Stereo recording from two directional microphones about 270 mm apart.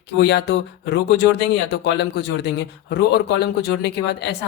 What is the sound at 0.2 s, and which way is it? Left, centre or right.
Speech, left.